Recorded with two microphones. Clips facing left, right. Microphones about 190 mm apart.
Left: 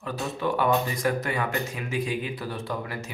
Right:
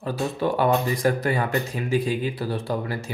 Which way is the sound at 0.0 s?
35° right (ahead or behind).